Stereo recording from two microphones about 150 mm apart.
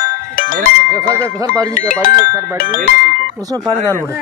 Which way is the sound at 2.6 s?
70° left (ahead or behind).